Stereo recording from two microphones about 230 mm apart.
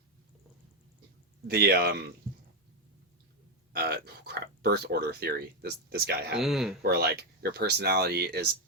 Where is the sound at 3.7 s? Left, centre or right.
Right.